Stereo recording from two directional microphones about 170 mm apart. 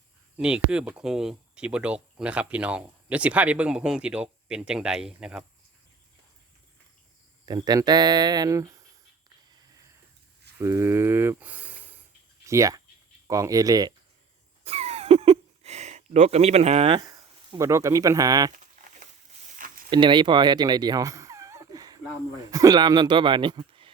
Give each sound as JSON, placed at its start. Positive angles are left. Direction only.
{"t": 0.3, "sound": "speech", "side_deg": -5}
{"t": 7.4, "sound": "speech", "side_deg": -25}
{"t": 10.6, "sound": "speech", "side_deg": -15}
{"t": 14.6, "sound": "a sound", "side_deg": -35}
{"t": 18.5, "sound": "a sound", "side_deg": -50}
{"t": 19.9, "sound": "speech", "side_deg": -30}